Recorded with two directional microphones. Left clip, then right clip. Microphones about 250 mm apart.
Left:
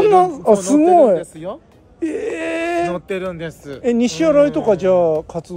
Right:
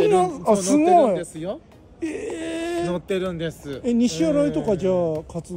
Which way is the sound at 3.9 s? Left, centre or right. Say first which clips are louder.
Left 1 dB; centre.